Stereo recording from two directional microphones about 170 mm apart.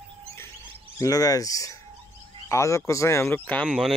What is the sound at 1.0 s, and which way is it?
Speech, 20° left (ahead or behind).